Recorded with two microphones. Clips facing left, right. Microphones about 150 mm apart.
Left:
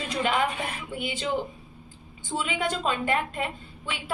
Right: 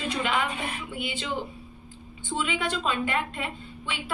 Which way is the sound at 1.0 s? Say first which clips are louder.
Left 1 dB; 45° left (ahead or behind).